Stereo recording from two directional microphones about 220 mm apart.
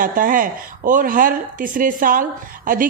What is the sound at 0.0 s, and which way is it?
Speech, 40° right (ahead or behind).